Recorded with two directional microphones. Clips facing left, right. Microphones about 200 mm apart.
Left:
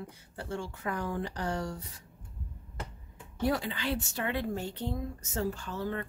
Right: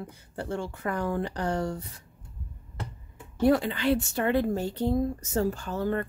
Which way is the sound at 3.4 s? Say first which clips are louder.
Right 8 dB; 60° right (ahead or behind).